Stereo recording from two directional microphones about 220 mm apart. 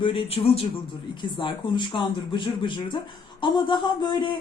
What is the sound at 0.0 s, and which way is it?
A woman's voice, 25° left (ahead or behind).